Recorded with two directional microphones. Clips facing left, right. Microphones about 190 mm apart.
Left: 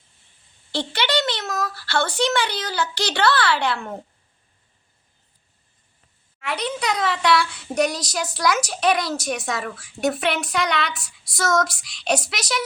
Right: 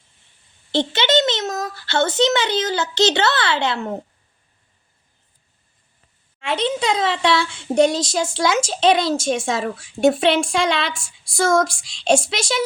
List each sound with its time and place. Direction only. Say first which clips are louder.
0.7 s a child's voice: right 5 dB; 20° right (ahead or behind)
6.4 s speech: right 5 dB; 25° right (ahead or behind)